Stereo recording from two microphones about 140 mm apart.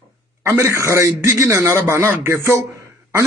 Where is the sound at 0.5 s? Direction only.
20° right (ahead or behind).